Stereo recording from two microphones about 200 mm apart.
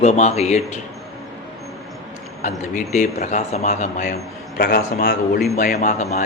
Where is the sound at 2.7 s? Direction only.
40° left (ahead or behind).